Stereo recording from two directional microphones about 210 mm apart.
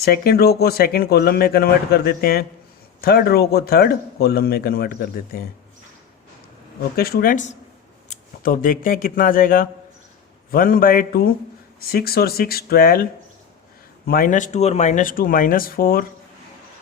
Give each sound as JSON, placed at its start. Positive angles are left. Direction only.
{"t": 0.0, "sound": "speech", "side_deg": 45}
{"t": 6.9, "sound": "speech", "side_deg": 45}
{"t": 14.1, "sound": "speech", "side_deg": 40}